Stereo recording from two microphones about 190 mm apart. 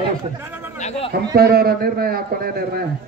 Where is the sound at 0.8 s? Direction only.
35° left (ahead or behind).